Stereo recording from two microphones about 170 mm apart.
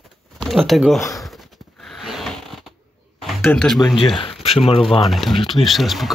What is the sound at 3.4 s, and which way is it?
Speech, 5° left (ahead or behind).